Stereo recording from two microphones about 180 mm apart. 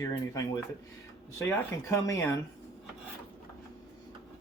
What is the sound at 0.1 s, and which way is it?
Speech, 20° left (ahead or behind).